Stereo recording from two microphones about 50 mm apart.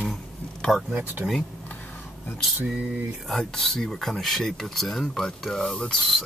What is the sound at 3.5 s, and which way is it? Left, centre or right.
Speech, centre.